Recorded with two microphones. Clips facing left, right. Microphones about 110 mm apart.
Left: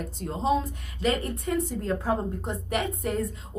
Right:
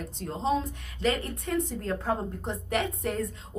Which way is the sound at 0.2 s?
5° left (ahead or behind).